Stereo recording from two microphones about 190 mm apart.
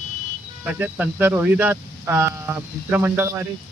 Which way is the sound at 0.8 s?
10° right (ahead or behind).